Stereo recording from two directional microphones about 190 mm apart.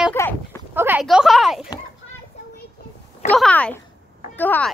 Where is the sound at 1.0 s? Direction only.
Centre (ahead or behind).